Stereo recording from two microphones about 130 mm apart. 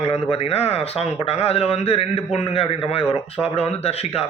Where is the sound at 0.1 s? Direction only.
50° left (ahead or behind).